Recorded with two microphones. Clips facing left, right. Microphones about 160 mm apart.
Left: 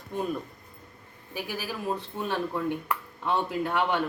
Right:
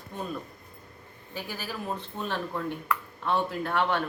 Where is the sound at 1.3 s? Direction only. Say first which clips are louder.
Left 2 dB; 10° left (ahead or behind).